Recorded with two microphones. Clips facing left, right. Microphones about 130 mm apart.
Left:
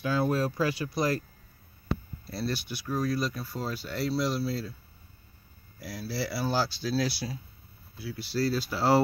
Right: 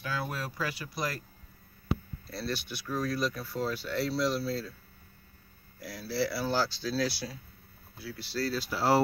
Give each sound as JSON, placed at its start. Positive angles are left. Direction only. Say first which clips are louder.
{"t": 0.0, "sound": "speech", "louder": "left 9 dB", "side_deg": 25}
{"t": 2.3, "sound": "speech", "louder": "left 3 dB", "side_deg": 10}
{"t": 5.8, "sound": "speech", "louder": "right 2 dB", "side_deg": 10}